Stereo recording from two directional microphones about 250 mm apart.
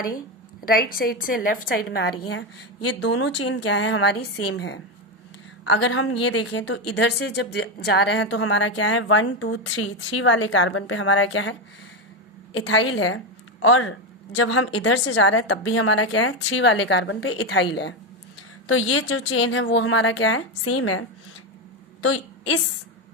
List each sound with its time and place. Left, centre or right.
0.7 s a woman's voice: left
12.5 s a woman's voice: left
18.7 s a woman's voice: left
22.0 s a woman's voice: left